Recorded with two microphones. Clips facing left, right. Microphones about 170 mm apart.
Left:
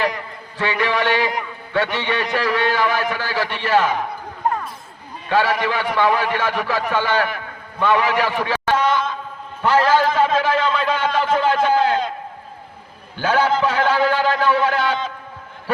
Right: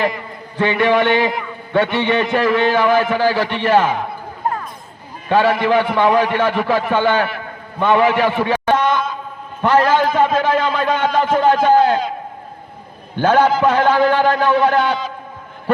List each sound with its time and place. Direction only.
0.5 s speech: 50° right (ahead or behind)
5.3 s a man's voice: 50° right (ahead or behind)
13.1 s speech: 50° right (ahead or behind)